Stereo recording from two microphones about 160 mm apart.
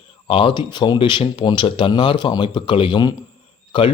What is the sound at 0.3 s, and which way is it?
Speech, 30° left (ahead or behind).